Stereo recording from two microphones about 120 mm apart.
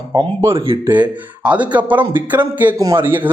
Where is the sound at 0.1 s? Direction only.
30° right (ahead or behind).